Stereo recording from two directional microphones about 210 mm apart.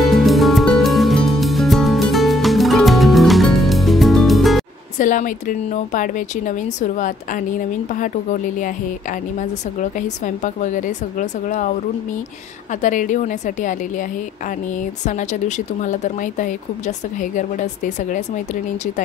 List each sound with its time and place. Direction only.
0.0 s music: centre (ahead or behind)
4.9 s speech: 40° left (ahead or behind)
12.8 s speech: 35° left (ahead or behind)
15.0 s speech: 35° left (ahead or behind)